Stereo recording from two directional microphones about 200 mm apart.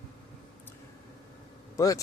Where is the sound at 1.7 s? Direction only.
15° left (ahead or behind).